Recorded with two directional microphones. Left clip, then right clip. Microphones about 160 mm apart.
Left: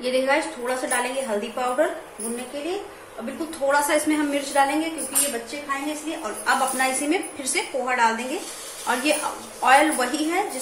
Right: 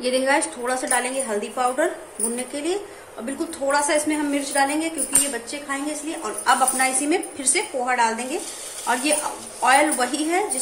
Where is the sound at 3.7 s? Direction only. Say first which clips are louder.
Even; 10° right (ahead or behind).